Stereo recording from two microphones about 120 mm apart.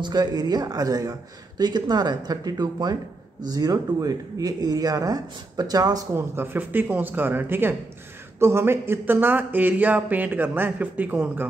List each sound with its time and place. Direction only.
0.0 s speech: 35° right (ahead or behind); by 11.4 s 15° right (ahead or behind)